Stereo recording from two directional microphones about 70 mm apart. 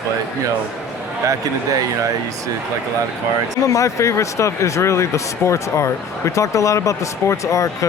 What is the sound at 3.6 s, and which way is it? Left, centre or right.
Speech, left.